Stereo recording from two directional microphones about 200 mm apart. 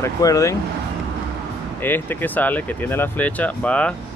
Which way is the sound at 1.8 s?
10° left (ahead or behind).